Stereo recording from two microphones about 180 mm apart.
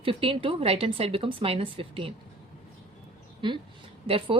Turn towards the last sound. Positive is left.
turn(degrees=-30)  # may be behind; listen again after turning